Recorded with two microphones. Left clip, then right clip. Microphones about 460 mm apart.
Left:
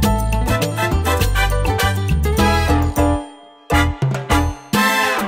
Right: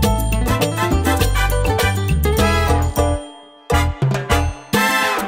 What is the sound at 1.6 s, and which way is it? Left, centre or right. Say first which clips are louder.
Music: right 1 dB; right.